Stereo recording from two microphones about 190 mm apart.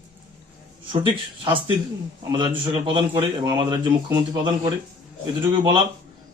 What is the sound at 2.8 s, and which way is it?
Speech, 25° right (ahead or behind).